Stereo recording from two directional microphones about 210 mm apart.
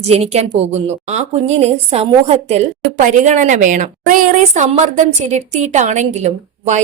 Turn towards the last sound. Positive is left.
turn(degrees=-30)  # may be behind; listen again after turning